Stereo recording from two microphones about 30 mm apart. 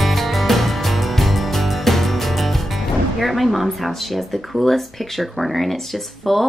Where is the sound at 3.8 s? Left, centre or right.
Centre.